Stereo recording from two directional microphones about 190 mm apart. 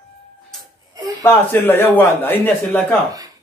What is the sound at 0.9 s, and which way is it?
Speech, 20° right (ahead or behind).